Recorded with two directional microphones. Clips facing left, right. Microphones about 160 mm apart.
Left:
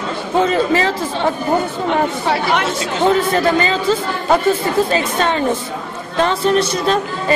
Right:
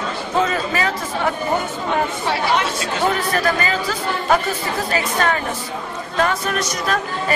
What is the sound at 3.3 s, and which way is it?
Speech, 25° left (ahead or behind).